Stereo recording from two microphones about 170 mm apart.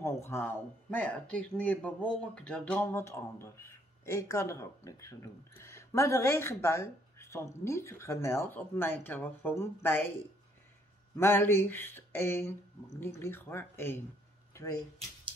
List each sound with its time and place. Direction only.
0.0 s speech: 15° left (ahead or behind)
11.1 s speech: 15° left (ahead or behind)